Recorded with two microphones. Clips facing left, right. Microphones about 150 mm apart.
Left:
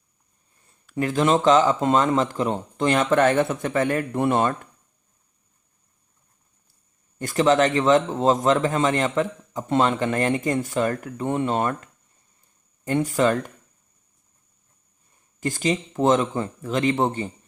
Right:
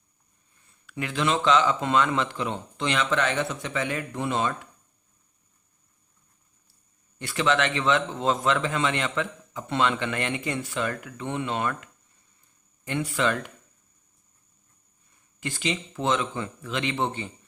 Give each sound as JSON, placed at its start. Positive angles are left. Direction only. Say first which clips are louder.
{"t": 0.7, "sound": "speech", "louder": "left 8 dB", "side_deg": 40}
{"t": 7.2, "sound": "a man's voice", "louder": "left 6 dB", "side_deg": 45}
{"t": 15.4, "sound": "speech", "louder": "left 6 dB", "side_deg": 45}